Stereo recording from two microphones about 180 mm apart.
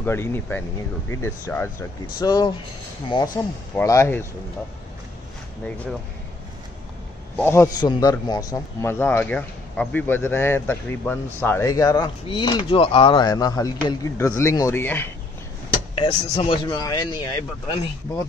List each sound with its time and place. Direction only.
0.0 s a man's voice: 15° left (ahead or behind)
3.7 s a man's voice: 15° left (ahead or behind)
7.3 s a man's voice: 15° left (ahead or behind)
16.1 s speech: 30° left (ahead or behind)